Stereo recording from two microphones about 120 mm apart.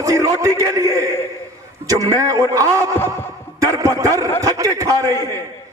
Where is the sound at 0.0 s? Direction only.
25° right (ahead or behind).